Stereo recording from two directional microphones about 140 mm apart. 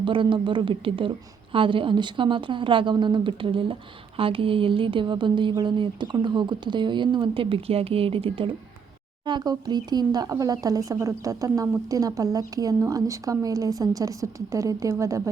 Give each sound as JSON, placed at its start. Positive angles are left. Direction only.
{"t": 0.0, "sound": "a woman's voice", "side_deg": -35}